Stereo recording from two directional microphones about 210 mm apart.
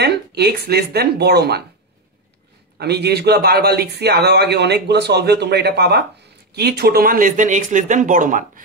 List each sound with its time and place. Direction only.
0.0 s speech: 50° right (ahead or behind)
2.8 s a man's voice: 50° right (ahead or behind)